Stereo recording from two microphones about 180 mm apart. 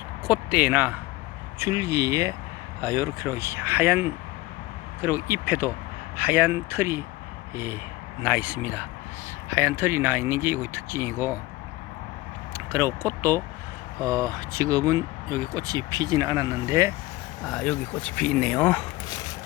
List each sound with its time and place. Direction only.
0.3 s speech: 5° right (ahead or behind)
12.5 s speech: 15° right (ahead or behind)
17.4 s speech: 5° left (ahead or behind)